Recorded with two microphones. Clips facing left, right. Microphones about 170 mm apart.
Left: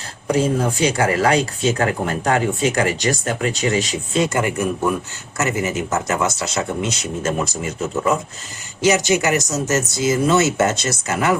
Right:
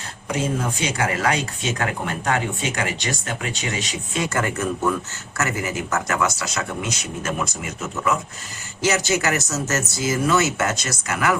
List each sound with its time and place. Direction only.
0.3 s speech: 35° left (ahead or behind)
4.3 s speech: 15° left (ahead or behind); by 8.2 s 30° left (ahead or behind)
8.8 s speech: 20° left (ahead or behind)